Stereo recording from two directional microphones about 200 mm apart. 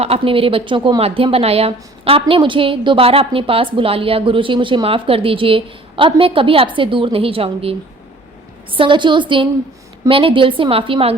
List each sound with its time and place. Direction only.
0.0 s a woman's voice: 30° right (ahead or behind)